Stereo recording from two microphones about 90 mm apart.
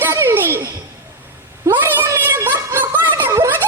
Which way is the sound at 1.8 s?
20° right (ahead or behind).